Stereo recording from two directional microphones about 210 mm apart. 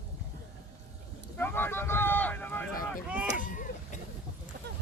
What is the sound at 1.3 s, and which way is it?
Vehicle, 10° left (ahead or behind).